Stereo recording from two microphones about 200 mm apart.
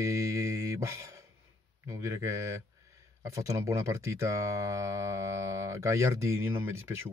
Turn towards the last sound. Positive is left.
turn(degrees=-15)  # may be behind; listen again after turning